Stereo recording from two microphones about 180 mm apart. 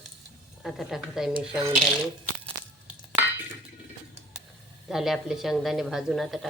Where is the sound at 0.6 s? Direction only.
Centre (ahead or behind).